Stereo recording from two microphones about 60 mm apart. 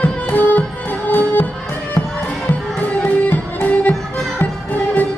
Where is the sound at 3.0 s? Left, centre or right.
Left.